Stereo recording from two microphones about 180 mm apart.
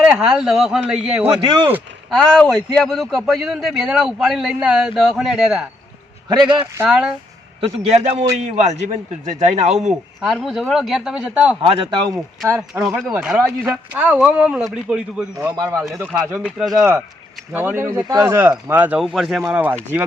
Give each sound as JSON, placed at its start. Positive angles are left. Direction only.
{"t": 0.0, "sound": "a man's voice", "side_deg": -5}
{"t": 6.2, "sound": "a man's voice", "side_deg": -25}
{"t": 6.8, "sound": "a man's voice", "side_deg": 0}
{"t": 7.6, "sound": "a man's voice", "side_deg": -35}
{"t": 9.9, "sound": "a man's voice", "side_deg": 0}
{"t": 11.6, "sound": "a man's voice", "side_deg": -30}
{"t": 12.5, "sound": "speech", "side_deg": -15}
{"t": 12.8, "sound": "a man's voice", "side_deg": 0}